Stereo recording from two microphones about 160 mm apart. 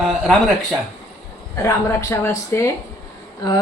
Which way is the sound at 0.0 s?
Centre (ahead or behind).